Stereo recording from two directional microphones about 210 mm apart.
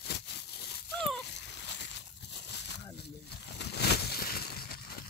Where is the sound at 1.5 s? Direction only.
55° left (ahead or behind).